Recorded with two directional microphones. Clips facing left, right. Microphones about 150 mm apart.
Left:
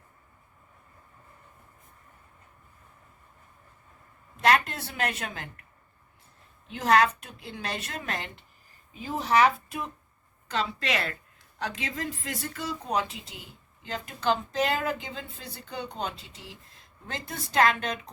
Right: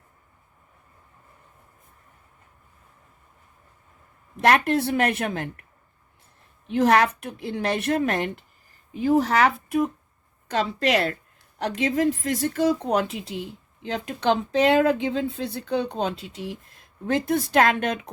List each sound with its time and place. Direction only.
4.4 s a woman's voice: 60° right (ahead or behind)
6.7 s a woman's voice: 60° right (ahead or behind)
10.5 s a woman's voice: 45° right (ahead or behind)
12.4 s a woman's voice: 45° right (ahead or behind)
12.8 s speech: 70° right (ahead or behind)